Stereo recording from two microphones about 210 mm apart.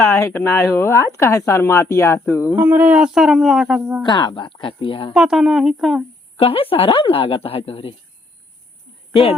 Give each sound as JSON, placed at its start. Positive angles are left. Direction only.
{"t": 0.0, "sound": "speech", "side_deg": 10}
{"t": 2.5, "sound": "speech", "side_deg": -10}
{"t": 4.0, "sound": "speech", "side_deg": 20}
{"t": 5.1, "sound": "speech", "side_deg": 0}
{"t": 6.3, "sound": "speech", "side_deg": 25}